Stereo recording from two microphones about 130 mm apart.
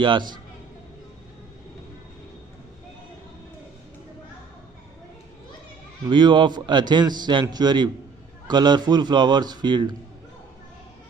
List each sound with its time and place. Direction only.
0.0 s a man's voice: 35° right (ahead or behind)
6.0 s a man's voice: 35° right (ahead or behind)